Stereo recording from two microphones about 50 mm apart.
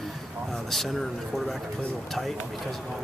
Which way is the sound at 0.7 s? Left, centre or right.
Centre.